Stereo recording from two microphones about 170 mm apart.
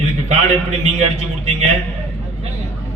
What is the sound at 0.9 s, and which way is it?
Speech, 45° right (ahead or behind).